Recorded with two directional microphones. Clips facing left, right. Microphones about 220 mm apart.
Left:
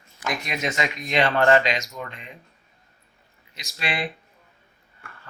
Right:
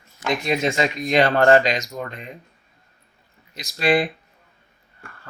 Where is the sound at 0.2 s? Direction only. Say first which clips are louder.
Right 7 dB; 30° right (ahead or behind).